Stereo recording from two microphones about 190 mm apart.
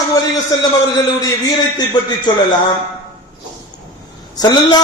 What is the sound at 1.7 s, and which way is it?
Speech, 20° left (ahead or behind).